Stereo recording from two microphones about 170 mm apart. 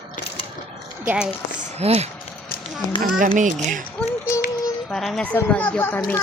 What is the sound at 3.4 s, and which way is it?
Speech, 45° right (ahead or behind).